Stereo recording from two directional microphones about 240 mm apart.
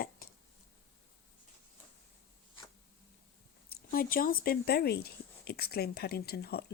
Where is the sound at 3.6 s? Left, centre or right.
Left.